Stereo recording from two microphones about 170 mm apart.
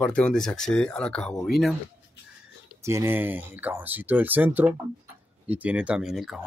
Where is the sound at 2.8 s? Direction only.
15° right (ahead or behind).